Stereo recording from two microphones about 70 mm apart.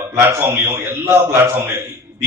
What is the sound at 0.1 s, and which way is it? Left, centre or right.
A man's voice, right.